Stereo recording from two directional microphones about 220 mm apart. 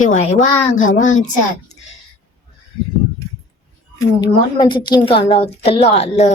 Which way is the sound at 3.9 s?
20° left (ahead or behind).